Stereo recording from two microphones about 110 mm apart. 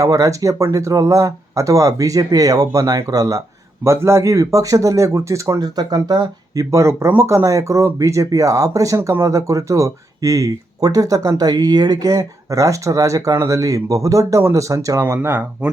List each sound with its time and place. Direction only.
0.0 s speech: 30° right (ahead or behind)